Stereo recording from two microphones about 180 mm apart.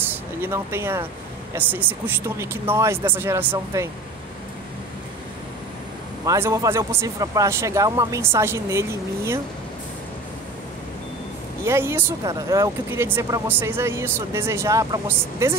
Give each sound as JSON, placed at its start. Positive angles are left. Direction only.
{"t": 0.1, "sound": "speech", "side_deg": -15}
{"t": 6.2, "sound": "speech", "side_deg": -15}
{"t": 11.6, "sound": "speech", "side_deg": -15}